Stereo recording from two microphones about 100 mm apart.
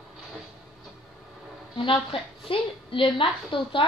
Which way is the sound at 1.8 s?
60° left (ahead or behind).